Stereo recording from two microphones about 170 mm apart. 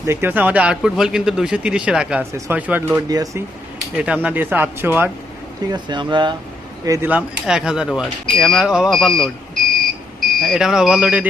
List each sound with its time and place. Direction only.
0.0 s speech: 15° right (ahead or behind)
3.1 s speech: 20° right (ahead or behind)
3.9 s speech: 5° right (ahead or behind)
5.7 s speech: 25° right (ahead or behind)
7.1 s speech: 5° right (ahead or behind)
10.4 s speech: centre (ahead or behind)